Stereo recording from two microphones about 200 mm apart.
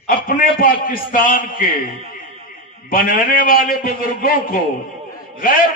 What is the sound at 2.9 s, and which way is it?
A man's voice, 45° left (ahead or behind).